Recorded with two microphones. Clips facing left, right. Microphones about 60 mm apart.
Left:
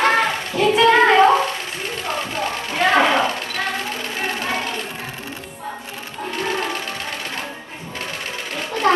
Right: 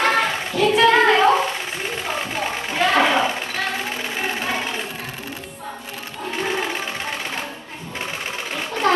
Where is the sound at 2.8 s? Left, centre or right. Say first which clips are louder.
Left 1 dB; centre.